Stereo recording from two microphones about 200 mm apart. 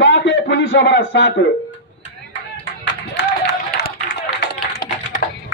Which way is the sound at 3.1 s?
55° left (ahead or behind).